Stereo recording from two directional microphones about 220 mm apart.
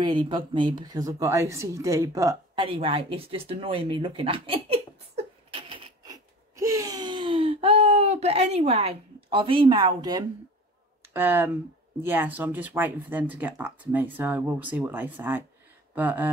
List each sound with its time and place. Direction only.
0.0 s speech: 20° right (ahead or behind)
11.1 s speech: 10° right (ahead or behind)
15.9 s a sound: 10° right (ahead or behind)